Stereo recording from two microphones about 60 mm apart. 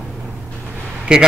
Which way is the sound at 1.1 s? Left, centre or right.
Centre.